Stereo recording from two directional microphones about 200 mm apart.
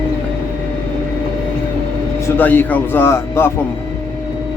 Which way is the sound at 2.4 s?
10° left (ahead or behind).